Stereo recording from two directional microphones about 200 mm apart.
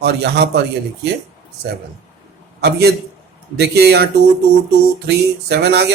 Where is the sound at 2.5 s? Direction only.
55° right (ahead or behind).